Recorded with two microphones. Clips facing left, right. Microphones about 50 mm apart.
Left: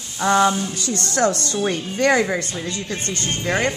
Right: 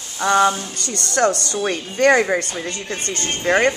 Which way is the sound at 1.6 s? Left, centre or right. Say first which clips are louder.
Right 3 dB; right.